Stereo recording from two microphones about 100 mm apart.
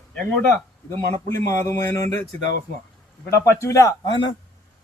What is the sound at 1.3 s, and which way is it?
Speech, 30° left (ahead or behind).